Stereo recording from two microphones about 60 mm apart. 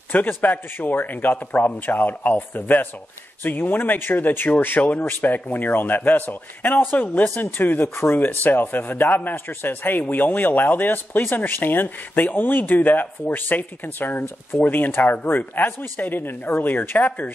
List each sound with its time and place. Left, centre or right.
0.1 s speech: left
7.9 s speech: left
8.2 s speech: left